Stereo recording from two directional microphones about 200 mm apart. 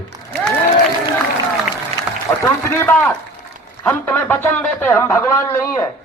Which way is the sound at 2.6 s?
10° left (ahead or behind).